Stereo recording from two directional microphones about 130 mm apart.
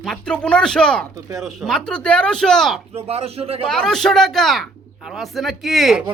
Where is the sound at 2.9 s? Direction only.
50° right (ahead or behind).